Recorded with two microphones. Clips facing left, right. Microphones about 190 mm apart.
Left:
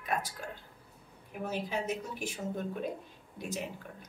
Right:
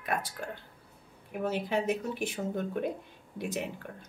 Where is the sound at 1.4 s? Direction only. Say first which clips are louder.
Right 5 dB; 60° right (ahead or behind).